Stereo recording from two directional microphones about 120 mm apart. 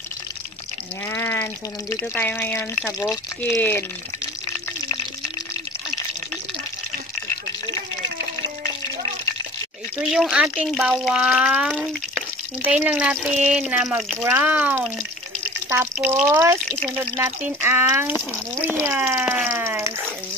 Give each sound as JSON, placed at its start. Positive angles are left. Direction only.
{"t": 1.0, "sound": "speech", "side_deg": 20}
{"t": 10.1, "sound": "speech", "side_deg": -5}